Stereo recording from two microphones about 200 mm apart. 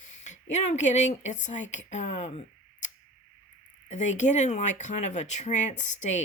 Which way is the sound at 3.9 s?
35° left (ahead or behind).